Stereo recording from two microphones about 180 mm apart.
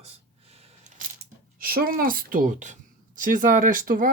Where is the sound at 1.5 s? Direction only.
55° right (ahead or behind).